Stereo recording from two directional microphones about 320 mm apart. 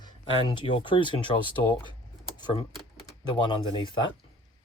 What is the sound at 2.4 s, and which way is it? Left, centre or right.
Speech, centre.